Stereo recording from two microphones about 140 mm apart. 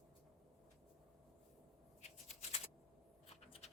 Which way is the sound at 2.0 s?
50° left (ahead or behind).